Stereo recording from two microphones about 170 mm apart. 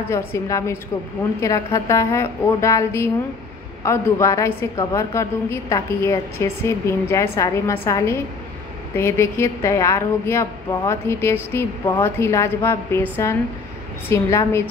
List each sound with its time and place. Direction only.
0.1 s a woman's voice: 15° left (ahead or behind)
8.9 s a woman's voice: 15° left (ahead or behind)